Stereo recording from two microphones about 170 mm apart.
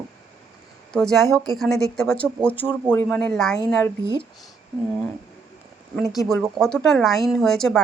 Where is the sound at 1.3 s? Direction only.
20° right (ahead or behind).